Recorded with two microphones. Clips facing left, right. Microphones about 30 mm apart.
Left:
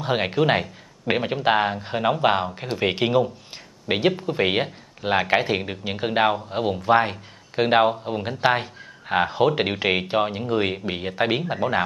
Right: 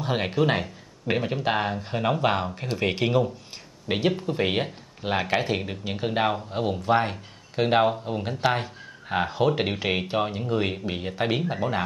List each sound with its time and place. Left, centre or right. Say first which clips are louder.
0.0 s a man's voice: left 3 dB; centre